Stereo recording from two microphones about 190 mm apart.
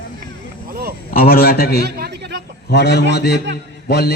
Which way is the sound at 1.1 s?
50° left (ahead or behind).